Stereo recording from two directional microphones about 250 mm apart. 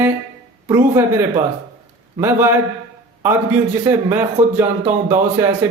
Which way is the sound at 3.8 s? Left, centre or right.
Centre.